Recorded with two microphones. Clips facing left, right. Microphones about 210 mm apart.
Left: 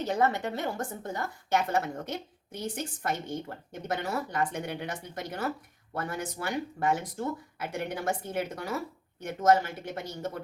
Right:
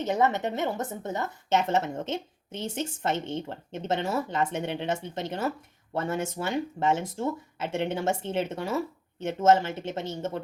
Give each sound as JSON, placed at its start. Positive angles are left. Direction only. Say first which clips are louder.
{"t": 0.0, "sound": "a woman's voice", "louder": "right 2 dB", "side_deg": -20}